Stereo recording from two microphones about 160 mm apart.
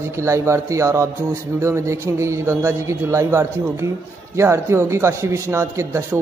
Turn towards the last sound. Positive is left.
turn(degrees=-15)  # may be behind; listen again after turning